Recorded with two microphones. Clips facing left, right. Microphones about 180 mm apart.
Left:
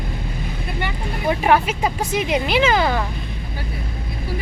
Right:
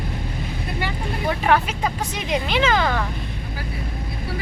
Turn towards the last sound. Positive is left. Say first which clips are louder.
# left 2 dB
turn(degrees=10)  # may be behind; listen again after turning